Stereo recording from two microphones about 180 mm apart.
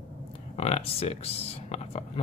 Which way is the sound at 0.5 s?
35° left (ahead or behind).